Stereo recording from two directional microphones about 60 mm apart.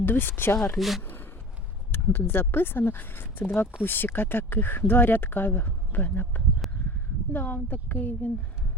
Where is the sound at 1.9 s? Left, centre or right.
Left.